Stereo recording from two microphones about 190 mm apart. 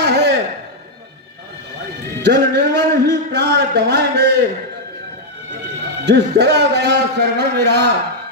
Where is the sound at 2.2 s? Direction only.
60° right (ahead or behind).